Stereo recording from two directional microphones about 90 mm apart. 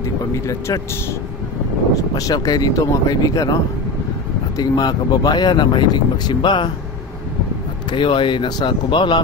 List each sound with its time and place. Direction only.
0.3 s speech: 35° left (ahead or behind)
2.0 s speech: 40° left (ahead or behind)
4.6 s speech: 50° left (ahead or behind)
7.9 s speech: 65° left (ahead or behind)